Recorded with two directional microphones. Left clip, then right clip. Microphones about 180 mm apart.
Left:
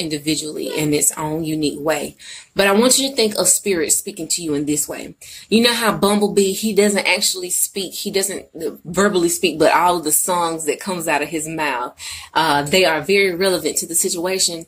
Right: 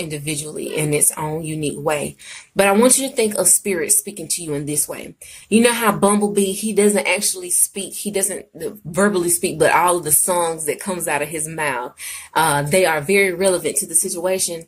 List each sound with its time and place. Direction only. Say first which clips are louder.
0.1 s speech: left 5 dB; 10° right (ahead or behind)